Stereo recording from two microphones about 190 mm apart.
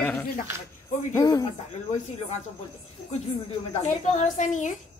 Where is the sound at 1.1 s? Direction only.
20° left (ahead or behind).